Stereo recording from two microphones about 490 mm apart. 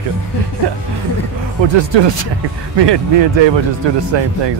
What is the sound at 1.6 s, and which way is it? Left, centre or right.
Speech, right.